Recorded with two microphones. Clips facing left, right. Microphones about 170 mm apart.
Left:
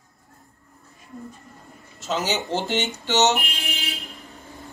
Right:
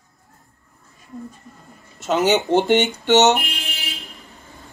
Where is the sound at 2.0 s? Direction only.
60° right (ahead or behind).